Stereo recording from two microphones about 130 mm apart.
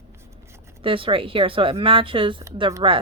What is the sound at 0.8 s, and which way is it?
Speech, 40° right (ahead or behind).